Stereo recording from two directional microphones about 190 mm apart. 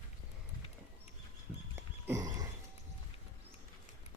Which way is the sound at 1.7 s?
15° right (ahead or behind).